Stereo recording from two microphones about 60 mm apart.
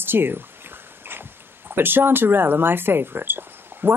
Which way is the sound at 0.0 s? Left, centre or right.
Right.